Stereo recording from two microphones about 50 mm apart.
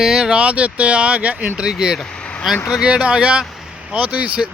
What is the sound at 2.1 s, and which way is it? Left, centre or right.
Vehicle, left.